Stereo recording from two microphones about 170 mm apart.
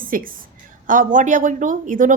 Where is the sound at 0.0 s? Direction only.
55° right (ahead or behind).